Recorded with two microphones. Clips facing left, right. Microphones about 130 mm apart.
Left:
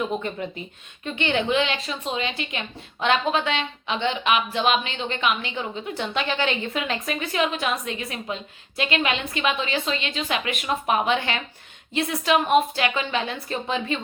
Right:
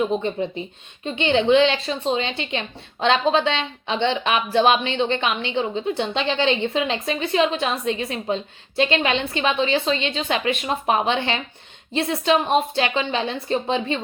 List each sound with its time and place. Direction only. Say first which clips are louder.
0.1 s a woman's voice: right 5 dB; 25° right (ahead or behind)